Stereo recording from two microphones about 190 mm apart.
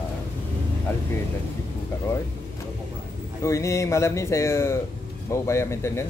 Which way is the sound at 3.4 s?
15° left (ahead or behind).